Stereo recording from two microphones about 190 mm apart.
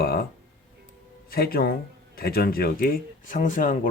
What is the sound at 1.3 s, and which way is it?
Speech, 50° left (ahead or behind).